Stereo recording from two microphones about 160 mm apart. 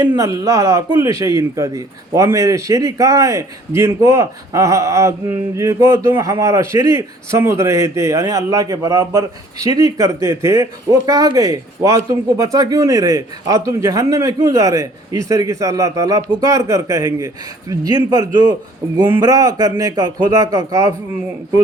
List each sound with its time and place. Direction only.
0.2 s a man's voice: 20° right (ahead or behind)